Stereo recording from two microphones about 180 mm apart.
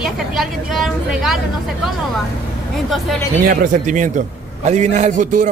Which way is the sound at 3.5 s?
45° right (ahead or behind).